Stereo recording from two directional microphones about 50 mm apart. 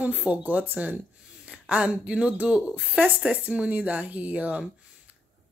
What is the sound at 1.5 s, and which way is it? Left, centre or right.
Speech, right.